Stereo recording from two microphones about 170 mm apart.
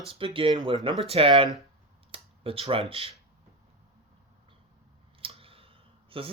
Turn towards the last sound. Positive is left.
turn(degrees=-30)  # may be behind; listen again after turning